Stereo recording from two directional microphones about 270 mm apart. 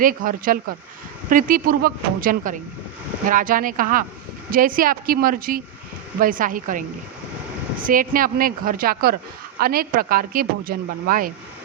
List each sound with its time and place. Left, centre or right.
0.0 s speech: right
7.9 s speech: right